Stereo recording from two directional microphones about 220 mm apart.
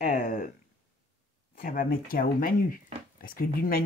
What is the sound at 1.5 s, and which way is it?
Speech, 40° left (ahead or behind).